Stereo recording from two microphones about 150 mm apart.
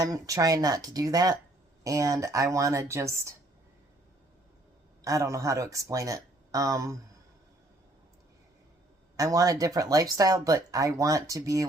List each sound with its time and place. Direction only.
0.0 s speech: 20° right (ahead or behind)
5.0 s speech: 20° right (ahead or behind)
9.1 s speech: 25° right (ahead or behind)